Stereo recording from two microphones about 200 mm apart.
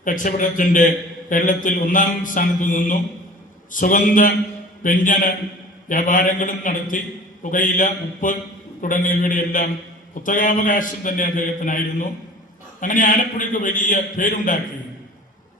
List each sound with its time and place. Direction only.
0.0 s a man's voice: 40° left (ahead or behind)